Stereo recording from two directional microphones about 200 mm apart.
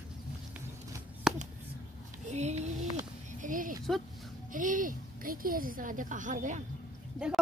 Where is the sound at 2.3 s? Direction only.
35° right (ahead or behind).